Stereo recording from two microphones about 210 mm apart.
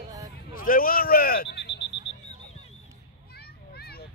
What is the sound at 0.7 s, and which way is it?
Speech, 40° left (ahead or behind).